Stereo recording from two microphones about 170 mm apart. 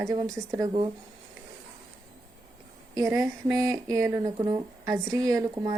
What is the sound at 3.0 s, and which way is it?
A woman's voice, 20° right (ahead or behind).